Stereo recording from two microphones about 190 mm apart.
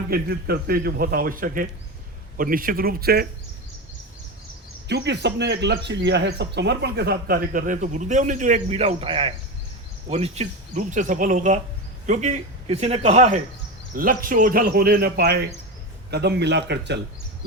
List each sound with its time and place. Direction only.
0.1 s a man's voice: 55° right (ahead or behind)
4.9 s speech: 65° right (ahead or behind); by 13.4 s 35° right (ahead or behind)
13.9 s a man's voice: 50° right (ahead or behind); by 17.0 s 65° right (ahead or behind)